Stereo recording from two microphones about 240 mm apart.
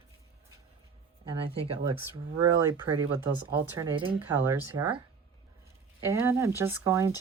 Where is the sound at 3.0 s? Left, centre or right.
Centre.